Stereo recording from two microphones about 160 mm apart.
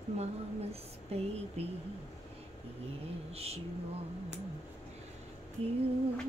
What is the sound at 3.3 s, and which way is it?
Speech, 40° right (ahead or behind).